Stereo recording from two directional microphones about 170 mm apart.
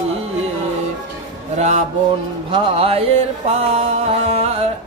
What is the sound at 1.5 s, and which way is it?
Mantra, 40° right (ahead or behind).